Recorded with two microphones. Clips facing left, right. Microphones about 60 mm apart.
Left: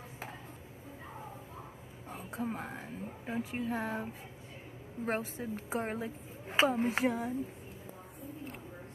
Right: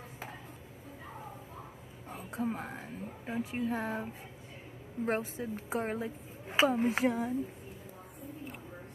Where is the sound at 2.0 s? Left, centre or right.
Centre.